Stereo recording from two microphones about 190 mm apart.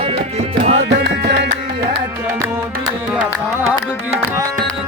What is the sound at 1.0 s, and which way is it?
Music, 60° right (ahead or behind).